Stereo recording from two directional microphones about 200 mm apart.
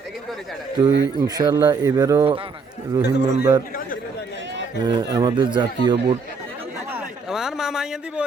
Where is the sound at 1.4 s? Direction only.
20° right (ahead or behind).